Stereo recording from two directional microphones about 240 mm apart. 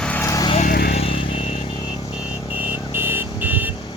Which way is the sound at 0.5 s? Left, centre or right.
Left.